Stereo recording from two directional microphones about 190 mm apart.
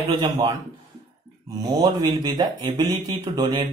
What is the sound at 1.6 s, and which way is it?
A man's voice, 20° right (ahead or behind).